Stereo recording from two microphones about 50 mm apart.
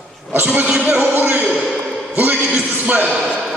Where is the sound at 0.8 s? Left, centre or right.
Right.